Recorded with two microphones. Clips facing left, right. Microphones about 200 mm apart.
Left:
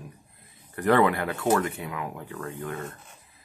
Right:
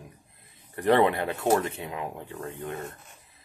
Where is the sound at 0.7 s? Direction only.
25° right (ahead or behind).